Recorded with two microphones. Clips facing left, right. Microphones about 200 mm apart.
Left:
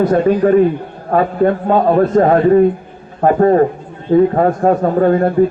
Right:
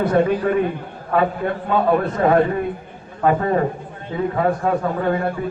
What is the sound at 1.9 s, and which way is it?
A man's voice, 40° left (ahead or behind).